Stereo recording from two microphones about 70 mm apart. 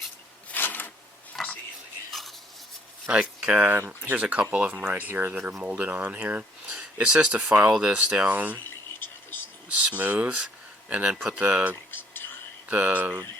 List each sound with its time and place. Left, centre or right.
0.5 s a sound: left
1.4 s whispering: centre
2.0 s stir: centre
3.1 s speech: centre
8.3 s speech: right
8.6 s fill: left
9.7 s speech: right
11.9 s a sound: left
12.6 s speech: right